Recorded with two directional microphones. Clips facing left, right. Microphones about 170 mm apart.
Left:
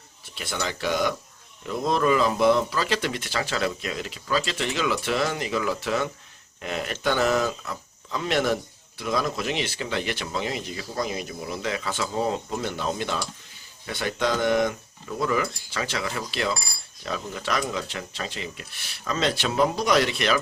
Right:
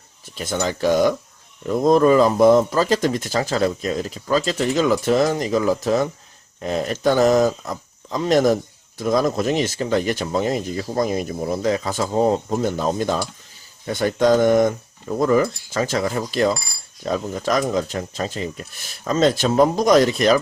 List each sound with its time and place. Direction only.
0.3 s speech: 45° right (ahead or behind)